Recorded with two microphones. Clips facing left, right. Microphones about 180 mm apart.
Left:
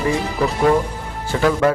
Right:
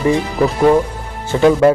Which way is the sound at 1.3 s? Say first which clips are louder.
Right 6 dB; 20° right (ahead or behind).